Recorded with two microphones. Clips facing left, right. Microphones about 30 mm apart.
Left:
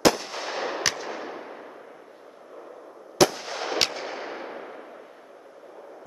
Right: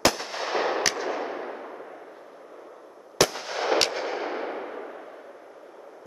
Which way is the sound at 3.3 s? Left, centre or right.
Centre.